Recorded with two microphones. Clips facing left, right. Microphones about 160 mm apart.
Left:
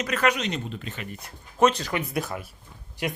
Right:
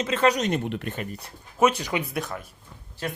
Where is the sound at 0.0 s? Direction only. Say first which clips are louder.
Right 3 dB; 25° right (ahead or behind).